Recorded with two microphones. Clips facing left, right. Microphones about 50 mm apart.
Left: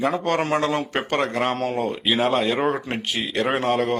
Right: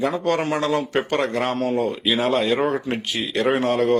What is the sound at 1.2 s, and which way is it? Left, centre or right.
Speech, centre.